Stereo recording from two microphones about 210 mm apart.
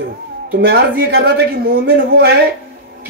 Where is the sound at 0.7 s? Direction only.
50° right (ahead or behind).